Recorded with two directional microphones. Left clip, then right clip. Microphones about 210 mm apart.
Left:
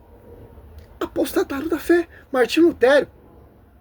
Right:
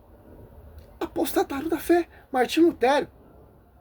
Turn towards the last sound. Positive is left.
turn(degrees=5)  # may be behind; listen again after turning